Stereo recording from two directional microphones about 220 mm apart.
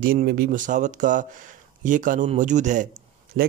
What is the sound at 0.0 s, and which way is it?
A man's voice, 40° right (ahead or behind).